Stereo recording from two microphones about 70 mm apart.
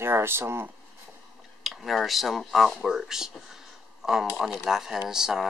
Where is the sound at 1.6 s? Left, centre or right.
Centre.